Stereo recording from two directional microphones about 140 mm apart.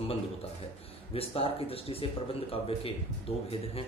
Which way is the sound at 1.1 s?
45° left (ahead or behind).